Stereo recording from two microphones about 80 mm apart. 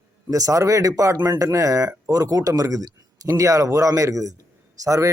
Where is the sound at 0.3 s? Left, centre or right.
Right.